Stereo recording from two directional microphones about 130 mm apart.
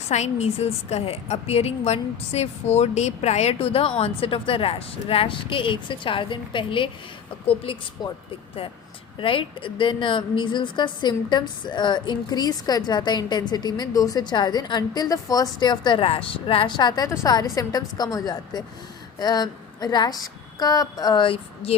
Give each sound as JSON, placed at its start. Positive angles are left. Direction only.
{"t": 0.0, "sound": "a woman's voice", "side_deg": 60}
{"t": 8.0, "sound": "a woman's voice", "side_deg": 35}
{"t": 21.2, "sound": "a woman's voice", "side_deg": 50}